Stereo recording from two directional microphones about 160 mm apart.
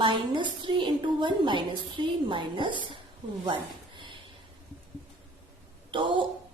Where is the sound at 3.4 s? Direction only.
30° right (ahead or behind).